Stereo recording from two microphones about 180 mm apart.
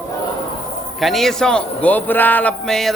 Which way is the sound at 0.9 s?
Centre (ahead or behind).